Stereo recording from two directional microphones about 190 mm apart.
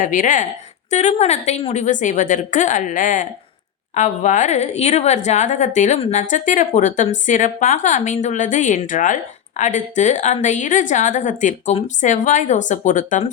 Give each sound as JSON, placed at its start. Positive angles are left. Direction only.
{"t": 0.0, "sound": "a woman's voice", "side_deg": 45}